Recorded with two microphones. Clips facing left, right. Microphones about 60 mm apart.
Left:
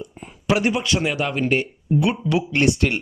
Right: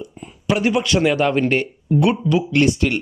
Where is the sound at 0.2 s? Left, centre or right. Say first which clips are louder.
Right 2 dB; left.